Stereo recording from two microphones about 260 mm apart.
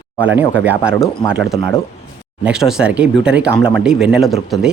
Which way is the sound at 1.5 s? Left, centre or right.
Left.